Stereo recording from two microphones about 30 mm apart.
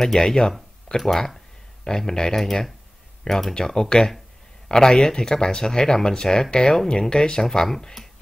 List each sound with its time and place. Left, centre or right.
0.0 s speech: centre
2.3 s speech: centre
6.5 s speech: left